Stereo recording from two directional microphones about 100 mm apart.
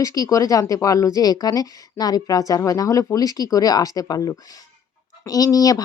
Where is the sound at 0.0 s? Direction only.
35° left (ahead or behind).